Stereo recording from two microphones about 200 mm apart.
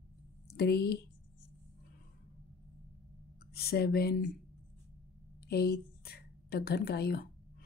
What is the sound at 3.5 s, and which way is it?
Speech, 50° left (ahead or behind).